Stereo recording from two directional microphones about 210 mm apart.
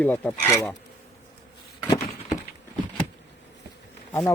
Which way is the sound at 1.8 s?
15° left (ahead or behind).